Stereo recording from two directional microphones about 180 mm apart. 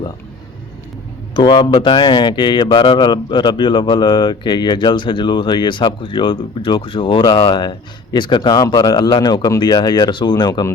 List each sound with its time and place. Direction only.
1.3 s speech: 25° left (ahead or behind)